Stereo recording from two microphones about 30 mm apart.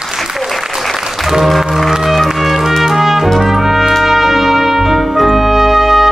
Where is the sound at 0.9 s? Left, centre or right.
Centre.